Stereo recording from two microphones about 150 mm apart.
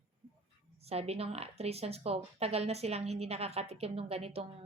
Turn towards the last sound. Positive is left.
turn(degrees=-45)  # may be behind; listen again after turning